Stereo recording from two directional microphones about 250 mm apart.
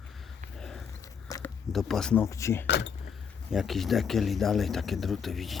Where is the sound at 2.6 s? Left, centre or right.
Left.